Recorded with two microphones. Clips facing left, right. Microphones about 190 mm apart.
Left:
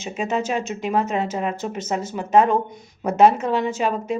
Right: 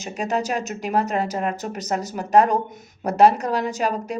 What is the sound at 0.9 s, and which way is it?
Speech, 35° right (ahead or behind).